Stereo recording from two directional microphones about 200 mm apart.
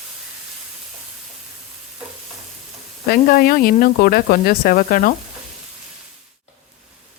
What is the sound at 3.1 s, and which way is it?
Speech, 45° left (ahead or behind).